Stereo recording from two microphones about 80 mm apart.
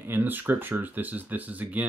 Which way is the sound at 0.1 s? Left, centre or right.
Right.